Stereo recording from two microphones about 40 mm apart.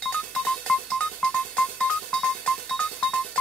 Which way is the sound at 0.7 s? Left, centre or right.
Centre.